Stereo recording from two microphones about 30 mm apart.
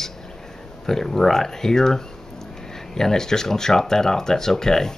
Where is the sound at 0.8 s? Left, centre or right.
Centre.